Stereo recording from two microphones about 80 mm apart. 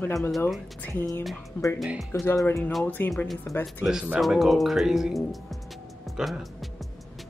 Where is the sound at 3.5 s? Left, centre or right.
Left.